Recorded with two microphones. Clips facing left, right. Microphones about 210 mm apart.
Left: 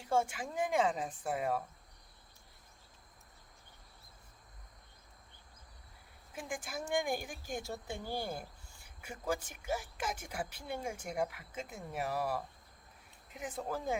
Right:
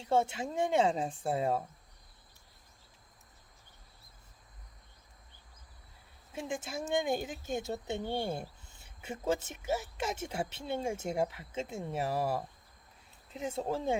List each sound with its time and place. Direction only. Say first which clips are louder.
0.0 s speech: right 3 dB; 25° right (ahead or behind)
6.3 s speech: right 4 dB; 25° right (ahead or behind)